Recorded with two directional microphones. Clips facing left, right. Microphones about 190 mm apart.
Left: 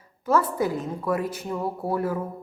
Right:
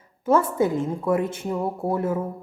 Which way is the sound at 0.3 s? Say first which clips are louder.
Right 3 dB; 25° right (ahead or behind).